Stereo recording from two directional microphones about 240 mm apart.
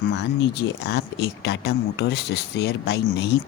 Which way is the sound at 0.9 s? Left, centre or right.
Left.